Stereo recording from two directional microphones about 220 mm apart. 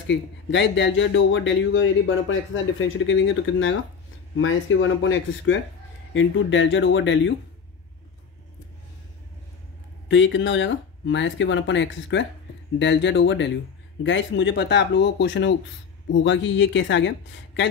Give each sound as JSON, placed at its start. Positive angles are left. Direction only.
{"t": 0.0, "sound": "speech", "side_deg": 55}
{"t": 10.0, "sound": "speech", "side_deg": 55}